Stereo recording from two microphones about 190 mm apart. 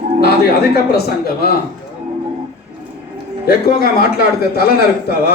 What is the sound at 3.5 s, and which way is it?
A man's voice, 55° left (ahead or behind).